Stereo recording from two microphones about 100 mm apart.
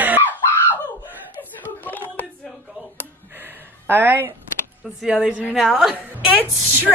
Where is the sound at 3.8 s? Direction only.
20° right (ahead or behind).